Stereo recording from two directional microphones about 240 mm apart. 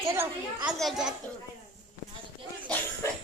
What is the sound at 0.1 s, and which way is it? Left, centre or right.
A child's voice, centre.